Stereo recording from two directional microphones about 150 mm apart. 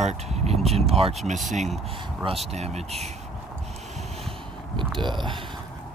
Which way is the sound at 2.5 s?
45° right (ahead or behind).